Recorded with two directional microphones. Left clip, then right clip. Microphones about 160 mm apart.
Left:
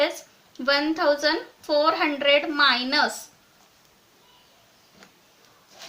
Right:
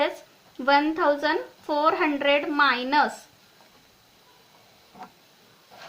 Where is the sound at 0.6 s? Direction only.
35° right (ahead or behind).